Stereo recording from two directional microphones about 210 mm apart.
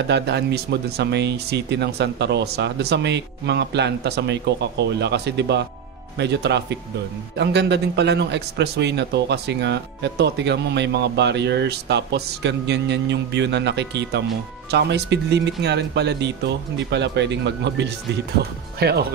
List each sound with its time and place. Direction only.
0.1 s speech: 55° right (ahead or behind)